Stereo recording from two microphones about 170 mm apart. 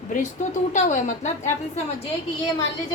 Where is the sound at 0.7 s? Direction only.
45° left (ahead or behind).